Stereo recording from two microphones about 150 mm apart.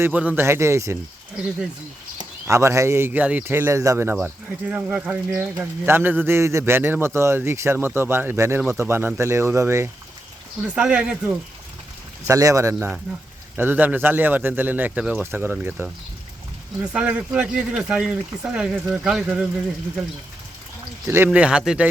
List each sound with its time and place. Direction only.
0.0 s a man's voice: 10° right (ahead or behind)
2.5 s a man's voice: 20° right (ahead or behind)
10.8 s a man's voice: 5° right (ahead or behind)
12.3 s a man's voice: 20° right (ahead or behind); by 19.5 s 5° right (ahead or behind)
21.3 s a man's voice: 5° right (ahead or behind)